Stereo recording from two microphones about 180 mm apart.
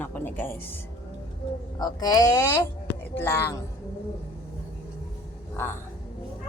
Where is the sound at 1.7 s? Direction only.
20° left (ahead or behind).